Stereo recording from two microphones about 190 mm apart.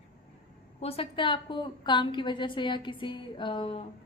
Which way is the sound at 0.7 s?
30° left (ahead or behind).